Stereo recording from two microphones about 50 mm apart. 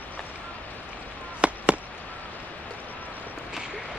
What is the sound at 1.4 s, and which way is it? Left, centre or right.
Fireworks, right.